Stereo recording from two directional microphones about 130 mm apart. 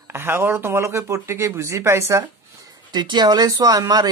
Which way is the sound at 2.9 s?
35° right (ahead or behind).